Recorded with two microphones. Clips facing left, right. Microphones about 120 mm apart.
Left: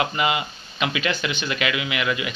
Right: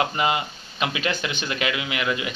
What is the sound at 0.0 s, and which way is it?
Speech, 35° right (ahead or behind).